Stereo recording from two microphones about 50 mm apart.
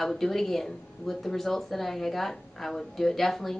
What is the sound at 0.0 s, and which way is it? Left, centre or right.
Speech, centre.